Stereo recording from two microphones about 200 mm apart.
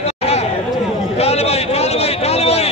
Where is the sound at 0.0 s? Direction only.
30° left (ahead or behind).